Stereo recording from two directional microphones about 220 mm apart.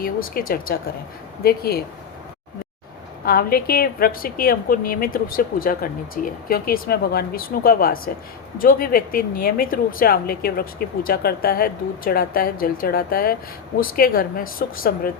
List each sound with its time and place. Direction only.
0.0 s a woman's voice: 40° left (ahead or behind)
3.2 s a woman's voice: 45° left (ahead or behind)